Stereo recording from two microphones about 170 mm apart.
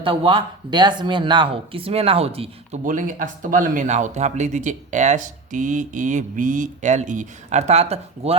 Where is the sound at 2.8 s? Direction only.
50° right (ahead or behind).